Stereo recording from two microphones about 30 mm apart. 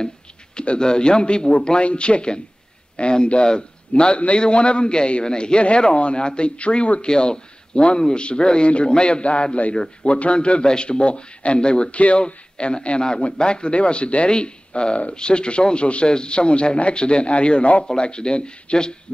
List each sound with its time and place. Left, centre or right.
0.6 s speech: left
11.9 s speech: left